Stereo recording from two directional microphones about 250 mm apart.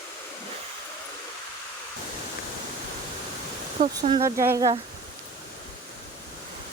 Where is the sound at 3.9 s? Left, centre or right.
Centre.